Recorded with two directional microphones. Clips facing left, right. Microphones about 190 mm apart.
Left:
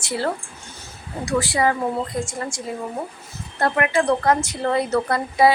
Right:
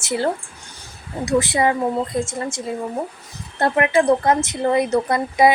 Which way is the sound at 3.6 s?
25° right (ahead or behind).